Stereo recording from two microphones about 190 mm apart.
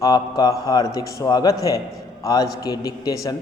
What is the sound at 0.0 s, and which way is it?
A man's voice, 20° left (ahead or behind).